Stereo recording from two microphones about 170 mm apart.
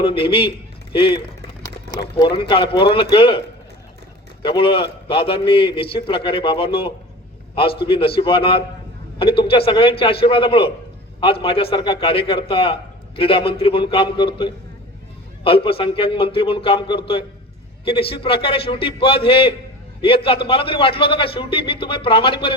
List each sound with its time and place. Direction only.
0.0 s a man's voice: 30° left (ahead or behind)
4.4 s a man's voice: 30° left (ahead or behind)